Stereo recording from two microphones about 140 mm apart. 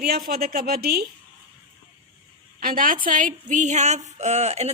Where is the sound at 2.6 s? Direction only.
80° right.